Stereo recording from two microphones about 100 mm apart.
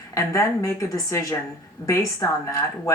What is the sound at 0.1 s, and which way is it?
Speech, 30° left (ahead or behind).